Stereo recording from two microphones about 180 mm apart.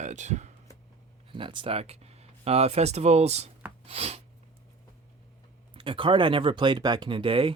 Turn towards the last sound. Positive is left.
turn(degrees=-30)  # may be behind; listen again after turning